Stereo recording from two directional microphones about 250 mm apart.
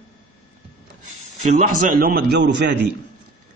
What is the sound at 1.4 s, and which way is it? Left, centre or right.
A man's voice, right.